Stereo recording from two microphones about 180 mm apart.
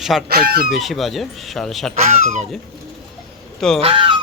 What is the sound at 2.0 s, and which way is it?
Speech, 40° right (ahead or behind).